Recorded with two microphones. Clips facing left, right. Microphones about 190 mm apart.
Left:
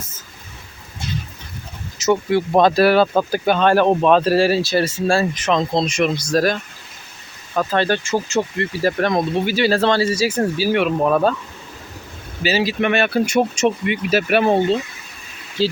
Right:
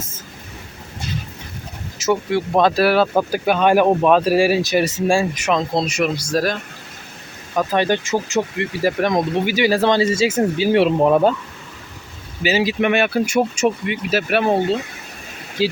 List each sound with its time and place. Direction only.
2.0 s speech: centre (ahead or behind)
7.5 s speech: 15° right (ahead or behind)
12.4 s speech: 15° right (ahead or behind); by 14.8 s centre (ahead or behind)
15.6 s speech: 10° right (ahead or behind)